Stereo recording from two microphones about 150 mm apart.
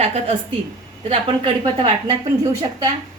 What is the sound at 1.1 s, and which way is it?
A woman's voice, 35° right (ahead or behind).